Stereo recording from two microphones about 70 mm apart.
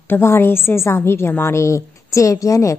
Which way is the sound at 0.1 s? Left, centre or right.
Left.